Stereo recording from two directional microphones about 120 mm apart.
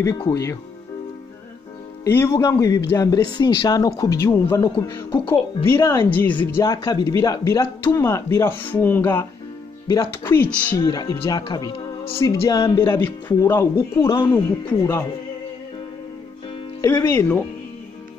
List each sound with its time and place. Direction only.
0.0 s speech: 25° left (ahead or behind)
2.0 s speech: 20° left (ahead or behind)
6.9 s speech: 35° left (ahead or behind); by 10.9 s 15° left (ahead or behind)
10.9 s speech: 30° left (ahead or behind)
14.0 s speech: 40° left (ahead or behind)
17.1 s speech: 15° left (ahead or behind)